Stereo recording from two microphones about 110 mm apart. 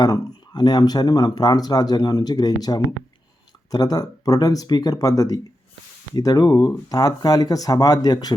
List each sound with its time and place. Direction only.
0.0 s speech: 40° left (ahead or behind)